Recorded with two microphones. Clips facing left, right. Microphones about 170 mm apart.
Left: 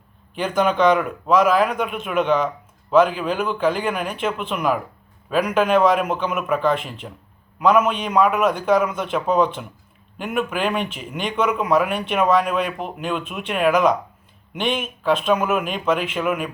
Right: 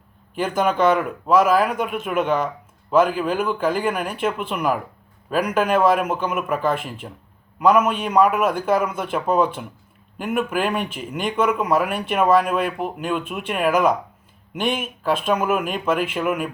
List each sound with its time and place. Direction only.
0.3 s a man's voice: 5° right (ahead or behind)